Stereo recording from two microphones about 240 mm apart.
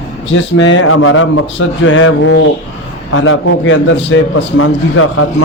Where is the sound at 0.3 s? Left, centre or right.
Left.